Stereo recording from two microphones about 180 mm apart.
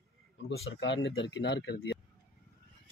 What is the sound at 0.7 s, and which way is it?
Speech, 90° left.